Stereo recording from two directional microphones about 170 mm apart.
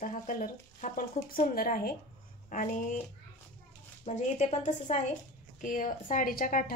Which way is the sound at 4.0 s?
40° left (ahead or behind).